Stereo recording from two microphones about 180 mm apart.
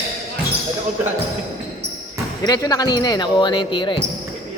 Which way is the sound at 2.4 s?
20° left (ahead or behind).